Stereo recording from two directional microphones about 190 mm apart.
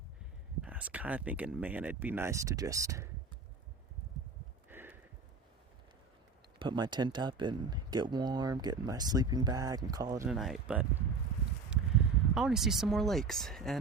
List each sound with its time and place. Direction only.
0.6 s speech: 5° right (ahead or behind)
4.7 s a sound: 10° right (ahead or behind)
6.6 s speech: 25° right (ahead or behind)
10.2 s speech: centre (ahead or behind)
12.3 s speech: 5° right (ahead or behind)